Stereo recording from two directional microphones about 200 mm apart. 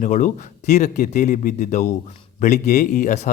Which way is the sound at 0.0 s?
40° left (ahead or behind).